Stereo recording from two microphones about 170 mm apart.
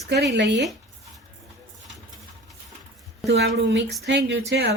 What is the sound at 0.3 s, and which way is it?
Speech, 90° right.